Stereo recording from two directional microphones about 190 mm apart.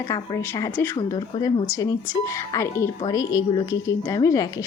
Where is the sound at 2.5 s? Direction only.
15° left (ahead or behind).